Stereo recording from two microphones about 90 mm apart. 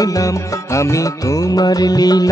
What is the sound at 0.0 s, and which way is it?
Music, 40° left (ahead or behind).